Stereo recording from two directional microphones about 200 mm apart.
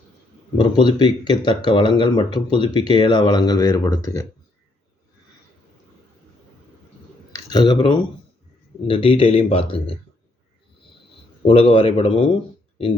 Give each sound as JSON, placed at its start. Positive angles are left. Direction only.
{"t": 0.5, "sound": "speech", "side_deg": 25}
{"t": 7.5, "sound": "speech", "side_deg": 20}
{"t": 11.4, "sound": "speech", "side_deg": 25}